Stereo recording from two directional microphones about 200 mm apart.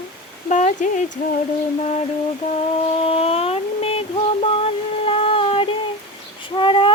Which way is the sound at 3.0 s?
30° left (ahead or behind).